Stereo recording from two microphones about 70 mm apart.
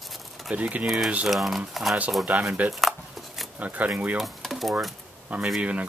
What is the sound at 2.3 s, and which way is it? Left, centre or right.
Speech, centre.